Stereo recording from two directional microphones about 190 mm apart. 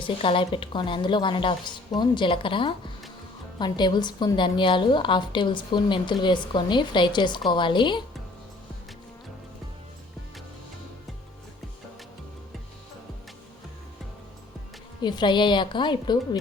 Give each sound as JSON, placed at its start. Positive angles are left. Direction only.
{"t": 0.0, "sound": "a woman's voice", "side_deg": 25}
{"t": 15.0, "sound": "a woman's voice", "side_deg": 25}